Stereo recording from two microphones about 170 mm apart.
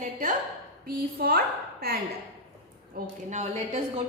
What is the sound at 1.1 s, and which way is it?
Speech, 65° right (ahead or behind).